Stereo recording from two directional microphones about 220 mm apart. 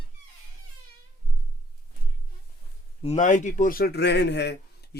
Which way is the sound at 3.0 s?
35° left (ahead or behind).